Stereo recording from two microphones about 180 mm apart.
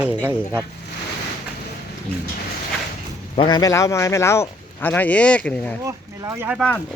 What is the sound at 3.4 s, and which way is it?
Speech, 25° left (ahead or behind).